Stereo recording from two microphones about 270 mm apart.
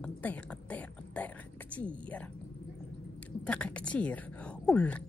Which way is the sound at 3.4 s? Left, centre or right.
Centre.